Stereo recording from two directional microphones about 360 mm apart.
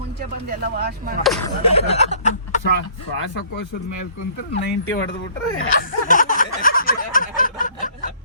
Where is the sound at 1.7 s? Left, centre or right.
Centre.